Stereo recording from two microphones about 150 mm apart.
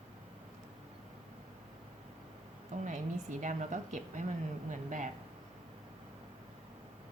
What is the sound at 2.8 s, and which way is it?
A woman's voice, 55° right (ahead or behind).